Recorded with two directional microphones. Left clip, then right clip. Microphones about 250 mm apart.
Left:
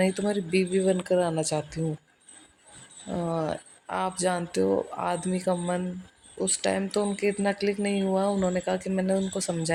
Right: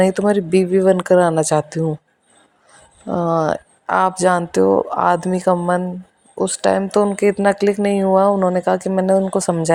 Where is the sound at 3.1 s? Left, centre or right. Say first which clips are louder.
Right 12 dB; right.